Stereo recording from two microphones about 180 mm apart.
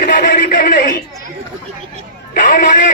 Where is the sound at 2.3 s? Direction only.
50° left (ahead or behind).